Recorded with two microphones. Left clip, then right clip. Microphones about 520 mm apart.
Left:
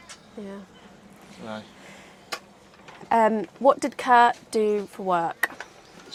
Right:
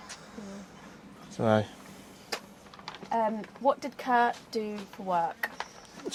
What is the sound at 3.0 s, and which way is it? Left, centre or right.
Speech, left.